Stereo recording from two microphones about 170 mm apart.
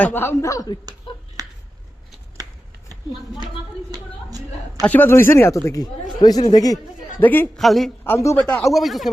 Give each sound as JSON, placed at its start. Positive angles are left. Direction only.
{"t": 0.0, "sound": "speech", "side_deg": 10}
{"t": 1.1, "sound": "finger snapping", "side_deg": 30}
{"t": 3.9, "sound": "speech", "side_deg": -20}
{"t": 4.8, "sound": "speech", "side_deg": 10}
{"t": 7.2, "sound": "a man's voice", "side_deg": 10}
{"t": 8.0, "sound": "speech", "side_deg": 15}